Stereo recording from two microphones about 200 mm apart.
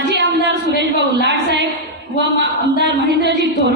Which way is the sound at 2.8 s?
60° right (ahead or behind).